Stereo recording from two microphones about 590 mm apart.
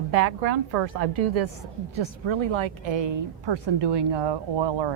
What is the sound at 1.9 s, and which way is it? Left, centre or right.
A woman's voice, right.